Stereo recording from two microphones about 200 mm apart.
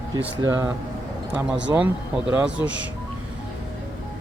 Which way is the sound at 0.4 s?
15° right (ahead or behind).